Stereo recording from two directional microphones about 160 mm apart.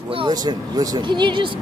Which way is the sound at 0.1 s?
30° right (ahead or behind).